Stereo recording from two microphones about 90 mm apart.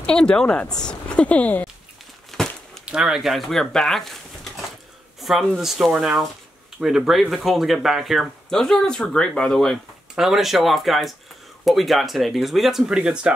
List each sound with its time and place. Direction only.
0.0 s speech: 10° left (ahead or behind)
2.3 s a sound: 5° left (ahead or behind)
2.8 s speech: 10° right (ahead or behind)